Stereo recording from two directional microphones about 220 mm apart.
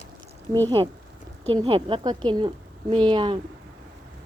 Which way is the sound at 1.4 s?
25° right (ahead or behind).